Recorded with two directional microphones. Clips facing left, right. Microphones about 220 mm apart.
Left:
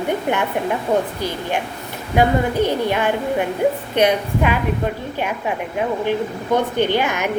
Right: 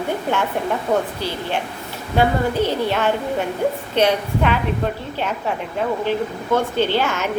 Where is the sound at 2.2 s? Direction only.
15° left (ahead or behind).